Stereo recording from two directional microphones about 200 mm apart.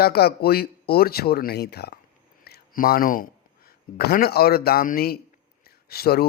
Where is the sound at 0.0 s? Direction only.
50° left (ahead or behind).